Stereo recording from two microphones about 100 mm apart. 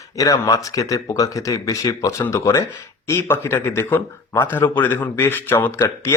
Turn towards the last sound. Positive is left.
turn(degrees=25)  # may be behind; listen again after turning